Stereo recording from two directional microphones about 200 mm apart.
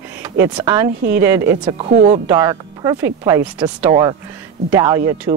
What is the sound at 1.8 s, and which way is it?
Speech, 55° right (ahead or behind).